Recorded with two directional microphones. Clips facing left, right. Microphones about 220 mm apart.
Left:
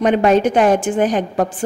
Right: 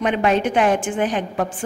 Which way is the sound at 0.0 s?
40° left (ahead or behind).